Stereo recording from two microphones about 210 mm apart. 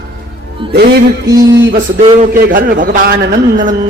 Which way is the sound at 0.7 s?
50° right (ahead or behind).